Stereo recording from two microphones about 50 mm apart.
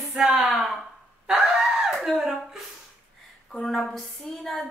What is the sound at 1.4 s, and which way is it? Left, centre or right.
Screaming, centre.